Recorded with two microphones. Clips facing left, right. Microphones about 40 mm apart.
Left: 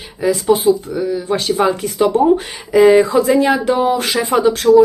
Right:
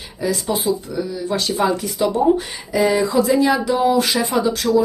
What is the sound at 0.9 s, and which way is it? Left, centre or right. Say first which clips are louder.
Speech: left 5 dB; left.